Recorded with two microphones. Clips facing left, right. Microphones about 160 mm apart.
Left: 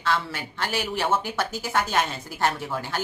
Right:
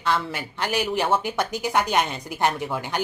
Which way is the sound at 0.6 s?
15° right (ahead or behind).